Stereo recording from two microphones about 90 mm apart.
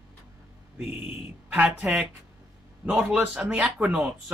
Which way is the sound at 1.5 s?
15° right (ahead or behind).